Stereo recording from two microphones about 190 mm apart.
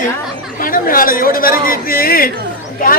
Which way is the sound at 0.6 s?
50° left (ahead or behind).